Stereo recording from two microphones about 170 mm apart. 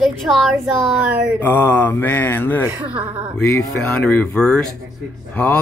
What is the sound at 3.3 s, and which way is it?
Speech, 10° left (ahead or behind).